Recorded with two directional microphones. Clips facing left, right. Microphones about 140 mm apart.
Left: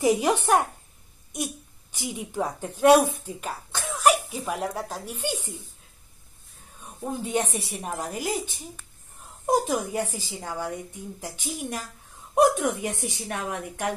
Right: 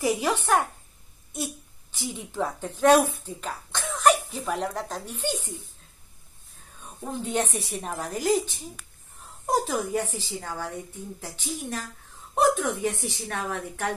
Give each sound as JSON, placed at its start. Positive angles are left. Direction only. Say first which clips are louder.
{"t": 0.0, "sound": "a child's voice", "louder": "left 3 dB", "side_deg": 15}
{"t": 3.8, "sound": "cough", "louder": "even", "side_deg": 10}
{"t": 4.3, "sound": "a child's voice", "louder": "even", "side_deg": 10}
{"t": 7.1, "sound": "a child's voice", "louder": "left 1 dB", "side_deg": 10}
{"t": 9.5, "sound": "a child's voice", "louder": "left 1 dB", "side_deg": 15}